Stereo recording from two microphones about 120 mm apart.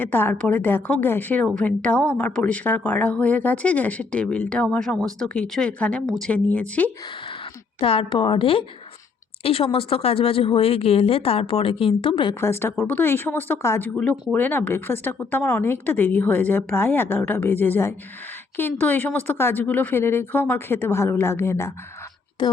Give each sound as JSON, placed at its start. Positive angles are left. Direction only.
{"t": 0.0, "sound": "speech", "side_deg": 15}
{"t": 7.8, "sound": "speech", "side_deg": 50}
{"t": 12.4, "sound": "speech", "side_deg": 20}
{"t": 13.9, "sound": "speech", "side_deg": 5}